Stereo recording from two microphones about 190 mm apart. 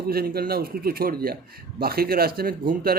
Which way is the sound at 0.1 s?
55° right (ahead or behind).